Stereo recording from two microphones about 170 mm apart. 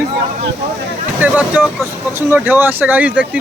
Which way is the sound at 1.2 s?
10° right (ahead or behind).